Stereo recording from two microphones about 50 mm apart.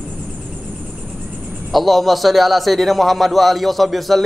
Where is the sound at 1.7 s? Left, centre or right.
Centre.